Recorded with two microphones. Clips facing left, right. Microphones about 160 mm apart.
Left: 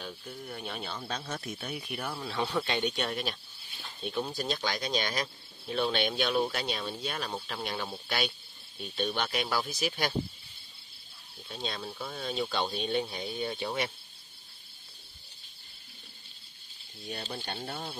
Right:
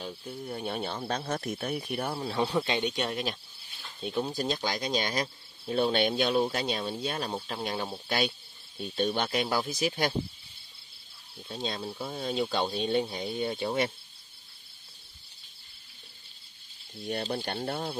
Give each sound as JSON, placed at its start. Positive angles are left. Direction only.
{"t": 0.0, "sound": "speech", "side_deg": -30}
{"t": 1.8, "sound": "speech", "side_deg": -35}
{"t": 9.2, "sound": "speech", "side_deg": -25}
{"t": 11.4, "sound": "speech", "side_deg": -25}
{"t": 17.3, "sound": "speech", "side_deg": -55}